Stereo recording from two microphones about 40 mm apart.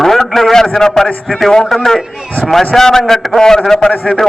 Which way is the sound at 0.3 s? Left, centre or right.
Centre.